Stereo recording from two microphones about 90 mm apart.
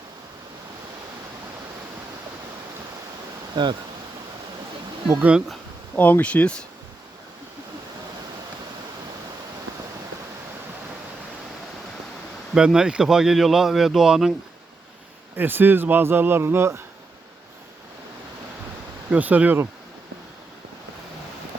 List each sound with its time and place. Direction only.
3.5 s speech: 60° right (ahead or behind)
6.0 s speech: 20° left (ahead or behind)
12.5 s speech: 5° right (ahead or behind)
15.4 s a man's voice: 20° right (ahead or behind)
19.1 s speech: 15° right (ahead or behind)